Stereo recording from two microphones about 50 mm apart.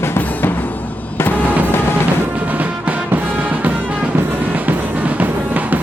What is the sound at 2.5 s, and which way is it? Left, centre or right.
Music, right.